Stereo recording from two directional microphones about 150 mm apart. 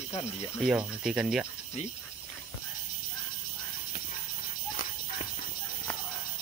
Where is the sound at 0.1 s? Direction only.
20° left (ahead or behind).